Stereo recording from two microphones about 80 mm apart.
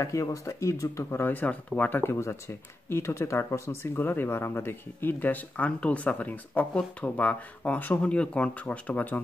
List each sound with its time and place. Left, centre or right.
0.0 s speech: left
1.2 s speech: left